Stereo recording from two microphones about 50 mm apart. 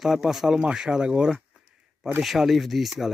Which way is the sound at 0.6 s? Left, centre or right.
Centre.